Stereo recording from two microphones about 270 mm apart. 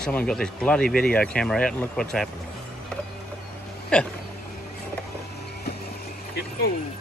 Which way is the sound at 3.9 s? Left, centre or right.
Centre.